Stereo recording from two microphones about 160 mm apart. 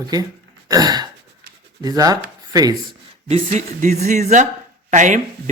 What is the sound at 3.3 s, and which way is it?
Speech, 50° right (ahead or behind).